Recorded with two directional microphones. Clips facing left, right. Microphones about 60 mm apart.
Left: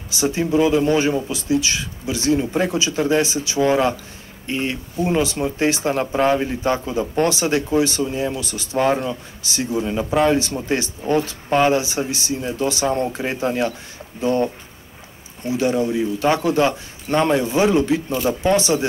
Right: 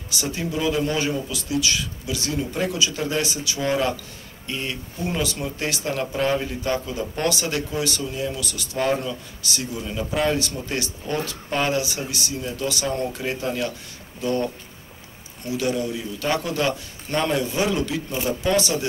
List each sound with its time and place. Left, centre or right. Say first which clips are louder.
0.1 s speech: left 8 dB; left